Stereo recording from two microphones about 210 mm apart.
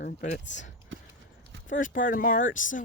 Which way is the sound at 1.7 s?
40° left (ahead or behind).